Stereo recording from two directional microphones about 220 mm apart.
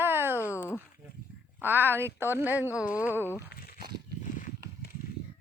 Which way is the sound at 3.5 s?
45° left (ahead or behind).